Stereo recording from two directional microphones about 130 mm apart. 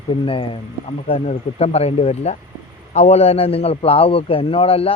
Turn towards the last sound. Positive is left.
turn(degrees=45)  # may be behind; listen again after turning